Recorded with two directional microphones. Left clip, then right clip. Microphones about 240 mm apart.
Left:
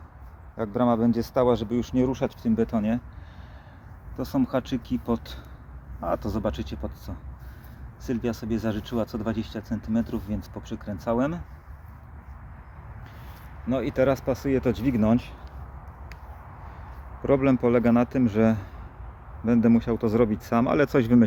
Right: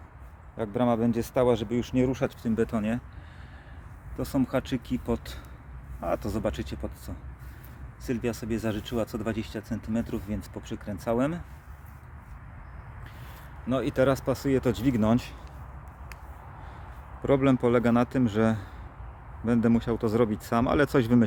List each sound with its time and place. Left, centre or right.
0.5 s speech: centre
4.2 s speech: centre
13.7 s speech: centre
17.2 s speech: centre